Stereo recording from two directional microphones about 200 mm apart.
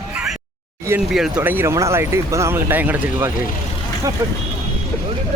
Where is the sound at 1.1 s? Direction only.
Centre (ahead or behind).